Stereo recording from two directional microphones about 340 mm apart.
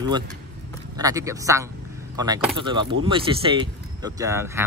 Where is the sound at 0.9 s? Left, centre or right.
Centre.